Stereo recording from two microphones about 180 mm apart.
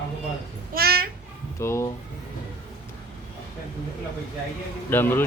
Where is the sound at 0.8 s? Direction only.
60° right (ahead or behind).